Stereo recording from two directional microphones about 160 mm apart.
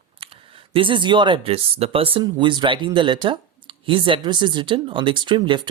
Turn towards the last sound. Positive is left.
turn(degrees=-30)  # may be behind; listen again after turning